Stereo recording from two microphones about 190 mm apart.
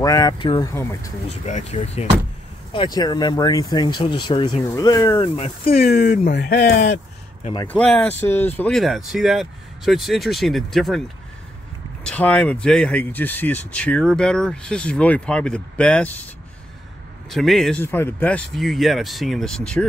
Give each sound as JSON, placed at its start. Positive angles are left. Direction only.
{"t": 0.0, "sound": "speech", "side_deg": 20}
{"t": 1.3, "sound": "speech", "side_deg": 35}
{"t": 2.7, "sound": "speech", "side_deg": 25}
{"t": 5.2, "sound": "speech", "side_deg": 30}
{"t": 5.9, "sound": "speech", "side_deg": 55}
{"t": 7.6, "sound": "speech", "side_deg": 10}
{"t": 12.0, "sound": "speech", "side_deg": 5}
{"t": 17.3, "sound": "speech", "side_deg": 0}